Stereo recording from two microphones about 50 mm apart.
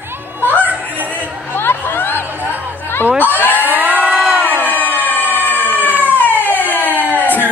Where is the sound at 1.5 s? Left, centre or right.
Left.